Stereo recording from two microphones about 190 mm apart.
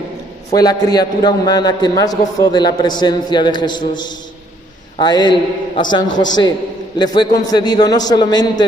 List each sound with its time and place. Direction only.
0.5 s a man's voice: 20° left (ahead or behind)